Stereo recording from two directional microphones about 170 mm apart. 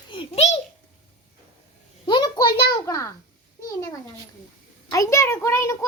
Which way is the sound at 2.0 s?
25° left (ahead or behind).